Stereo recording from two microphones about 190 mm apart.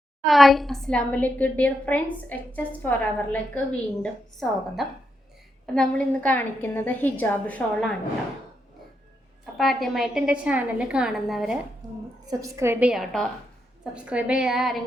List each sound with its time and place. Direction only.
0.3 s a woman's voice: centre (ahead or behind)
9.6 s a woman's voice: centre (ahead or behind)
11.8 s a woman's voice: 20° right (ahead or behind); by 14.8 s centre (ahead or behind)